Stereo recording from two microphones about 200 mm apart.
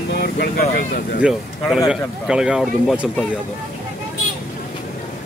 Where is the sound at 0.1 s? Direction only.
55° left (ahead or behind).